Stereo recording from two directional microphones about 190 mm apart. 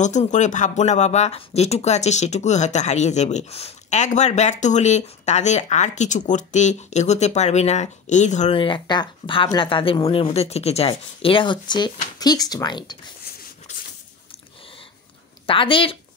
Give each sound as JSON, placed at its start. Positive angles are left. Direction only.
{"t": 0.0, "sound": "speech", "side_deg": 40}
{"t": 15.4, "sound": "speech", "side_deg": 25}